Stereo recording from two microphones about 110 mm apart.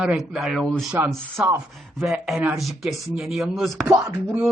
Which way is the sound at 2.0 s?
Centre (ahead or behind).